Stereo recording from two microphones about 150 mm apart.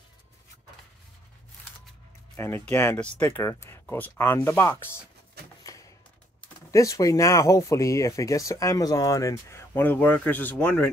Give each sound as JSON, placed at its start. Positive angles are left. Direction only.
{"t": 2.3, "sound": "speech", "side_deg": 15}
{"t": 5.6, "sound": "a sound", "side_deg": 25}
{"t": 6.7, "sound": "speech", "side_deg": 20}